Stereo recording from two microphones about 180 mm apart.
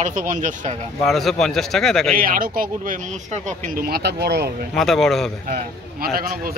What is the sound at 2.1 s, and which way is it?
Speech, 50° right (ahead or behind).